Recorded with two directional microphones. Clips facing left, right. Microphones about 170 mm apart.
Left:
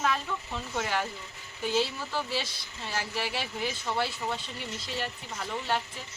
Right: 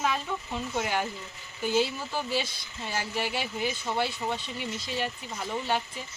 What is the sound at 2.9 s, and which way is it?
Speech, centre (ahead or behind).